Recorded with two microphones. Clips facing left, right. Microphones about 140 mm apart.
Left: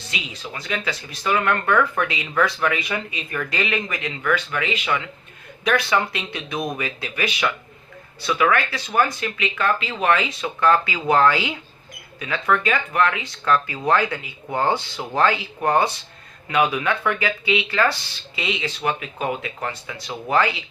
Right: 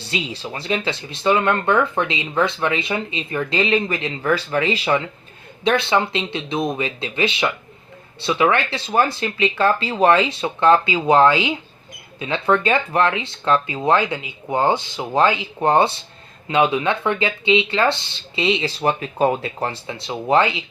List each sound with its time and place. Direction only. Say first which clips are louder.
0.0 s speech: right 6 dB; 30° right (ahead or behind)